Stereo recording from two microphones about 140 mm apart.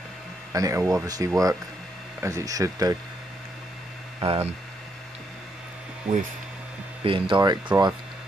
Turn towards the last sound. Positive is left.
turn(degrees=-35)  # may be behind; listen again after turning